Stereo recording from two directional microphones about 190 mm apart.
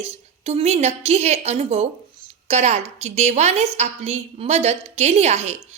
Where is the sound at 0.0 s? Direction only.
35° right (ahead or behind).